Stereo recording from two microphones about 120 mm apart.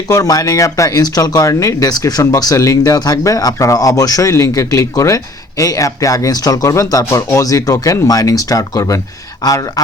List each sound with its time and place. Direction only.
0.1 s speech: 30° left (ahead or behind)